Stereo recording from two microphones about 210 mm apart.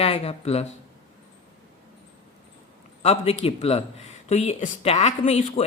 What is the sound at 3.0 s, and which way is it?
A woman's voice, 30° left (ahead or behind).